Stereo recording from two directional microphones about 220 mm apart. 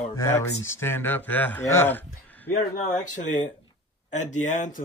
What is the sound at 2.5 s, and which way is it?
Speech, 35° left (ahead or behind).